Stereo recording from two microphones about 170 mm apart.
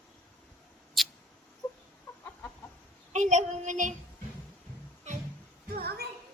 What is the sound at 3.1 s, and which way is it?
Child singing, 45° right (ahead or behind).